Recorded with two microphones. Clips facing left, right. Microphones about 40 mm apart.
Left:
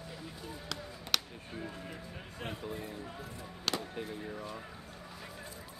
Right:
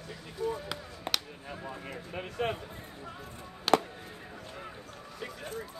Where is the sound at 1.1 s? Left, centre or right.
Right.